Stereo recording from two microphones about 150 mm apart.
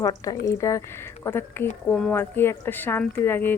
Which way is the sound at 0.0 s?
25° left (ahead or behind).